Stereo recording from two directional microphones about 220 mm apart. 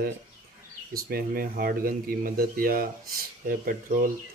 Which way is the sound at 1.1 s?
45° right (ahead or behind).